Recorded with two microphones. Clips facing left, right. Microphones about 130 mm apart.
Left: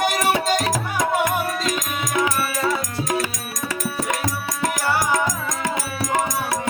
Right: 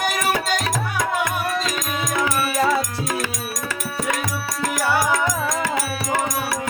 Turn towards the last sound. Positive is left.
turn(degrees=20)  # may be behind; listen again after turning